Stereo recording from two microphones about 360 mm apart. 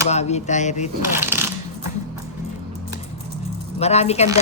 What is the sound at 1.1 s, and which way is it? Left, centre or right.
Coin, centre.